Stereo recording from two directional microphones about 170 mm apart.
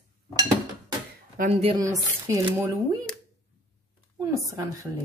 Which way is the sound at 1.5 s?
35° right (ahead or behind).